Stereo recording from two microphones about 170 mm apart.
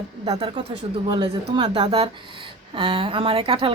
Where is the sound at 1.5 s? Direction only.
25° right (ahead or behind).